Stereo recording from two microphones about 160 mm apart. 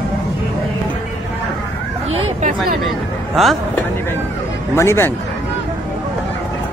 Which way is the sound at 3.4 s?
Centre (ahead or behind).